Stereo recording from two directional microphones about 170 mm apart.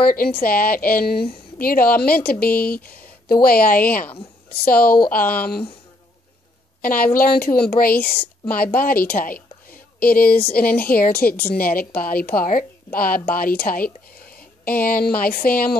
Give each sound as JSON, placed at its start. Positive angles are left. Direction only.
{"t": 0.0, "sound": "a woman's voice", "side_deg": 55}
{"t": 6.8, "sound": "a woman's voice", "side_deg": 55}